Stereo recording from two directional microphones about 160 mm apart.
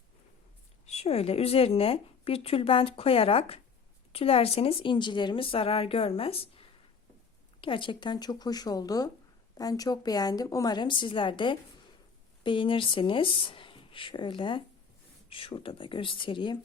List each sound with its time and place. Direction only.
0.9 s a woman's voice: 40° left (ahead or behind)